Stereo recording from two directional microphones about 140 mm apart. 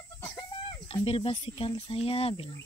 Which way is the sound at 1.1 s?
40° left (ahead or behind).